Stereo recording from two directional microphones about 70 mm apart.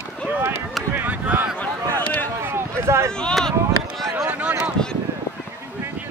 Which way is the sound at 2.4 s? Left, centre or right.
Right.